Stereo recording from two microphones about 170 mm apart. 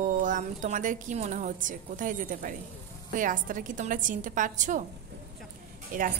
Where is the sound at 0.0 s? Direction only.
50° right (ahead or behind).